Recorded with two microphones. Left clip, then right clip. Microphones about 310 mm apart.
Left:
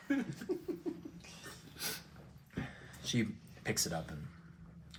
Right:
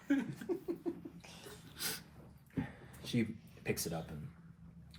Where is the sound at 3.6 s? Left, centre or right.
Left.